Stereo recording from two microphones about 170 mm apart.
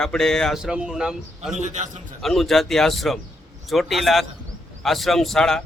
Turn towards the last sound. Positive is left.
turn(degrees=5)  # may be behind; listen again after turning